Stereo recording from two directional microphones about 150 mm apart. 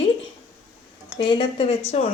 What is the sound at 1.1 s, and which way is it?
Speech, 35° left (ahead or behind).